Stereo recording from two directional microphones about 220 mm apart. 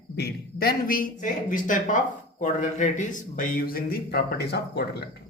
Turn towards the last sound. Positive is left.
turn(degrees=45)  # may be behind; listen again after turning